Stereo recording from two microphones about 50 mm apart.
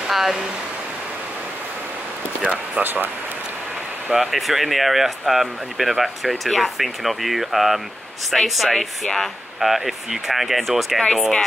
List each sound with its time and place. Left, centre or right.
0.1 s speech: centre
2.5 s speech: right
4.1 s speech: centre